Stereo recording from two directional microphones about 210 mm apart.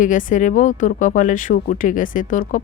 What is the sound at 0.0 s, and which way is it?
Speech, 40° left (ahead or behind).